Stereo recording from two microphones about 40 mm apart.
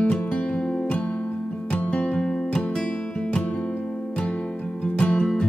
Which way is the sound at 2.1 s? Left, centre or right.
Centre.